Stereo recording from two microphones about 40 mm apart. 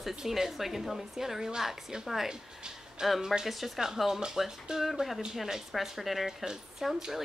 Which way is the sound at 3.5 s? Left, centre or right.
Centre.